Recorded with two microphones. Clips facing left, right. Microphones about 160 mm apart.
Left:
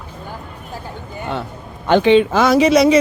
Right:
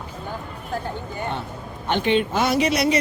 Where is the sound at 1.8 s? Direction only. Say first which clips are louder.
Left 9 dB; 90° left.